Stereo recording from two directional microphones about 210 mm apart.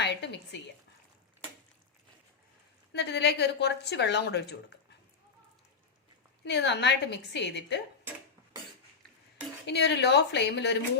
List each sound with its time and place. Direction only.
0.0 s a sound: 55° left (ahead or behind)
2.9 s speech: 55° left (ahead or behind)
6.4 s speech: 55° left (ahead or behind)
9.6 s speech: 55° left (ahead or behind)